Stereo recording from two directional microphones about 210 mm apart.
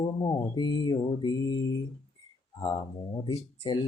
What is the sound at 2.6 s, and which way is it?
Speech, 20° left (ahead or behind).